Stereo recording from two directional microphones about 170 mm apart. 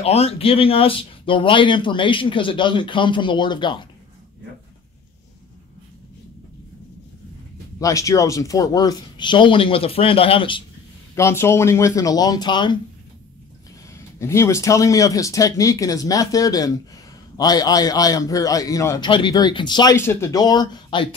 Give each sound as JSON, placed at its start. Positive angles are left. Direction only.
{"t": 0.0, "sound": "speech", "side_deg": 35}
{"t": 7.8, "sound": "speech", "side_deg": 20}
{"t": 11.1, "sound": "speech", "side_deg": 15}
{"t": 13.9, "sound": "speech", "side_deg": 15}